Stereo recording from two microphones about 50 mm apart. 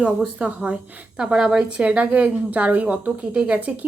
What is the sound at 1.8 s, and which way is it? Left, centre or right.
A woman's voice, right.